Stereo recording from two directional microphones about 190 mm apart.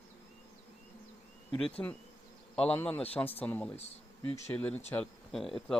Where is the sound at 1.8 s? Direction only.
15° left (ahead or behind).